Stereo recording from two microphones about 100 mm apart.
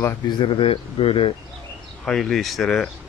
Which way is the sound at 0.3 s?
60° left (ahead or behind).